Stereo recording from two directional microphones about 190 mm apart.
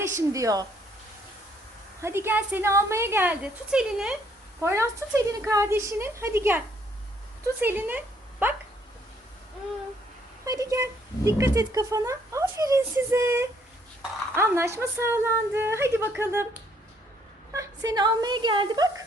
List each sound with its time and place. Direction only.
0.2 s a woman's voice: 15° right (ahead or behind)
2.0 s a woman's voice: 15° right (ahead or behind)
4.6 s a woman's voice: 15° right (ahead or behind)
10.4 s a woman's voice: 15° right (ahead or behind)